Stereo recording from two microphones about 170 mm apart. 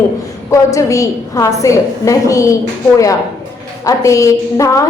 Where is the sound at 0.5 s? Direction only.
20° left (ahead or behind).